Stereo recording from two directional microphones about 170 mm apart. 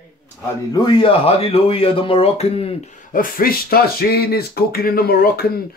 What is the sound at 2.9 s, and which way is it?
Speech, 50° left (ahead or behind).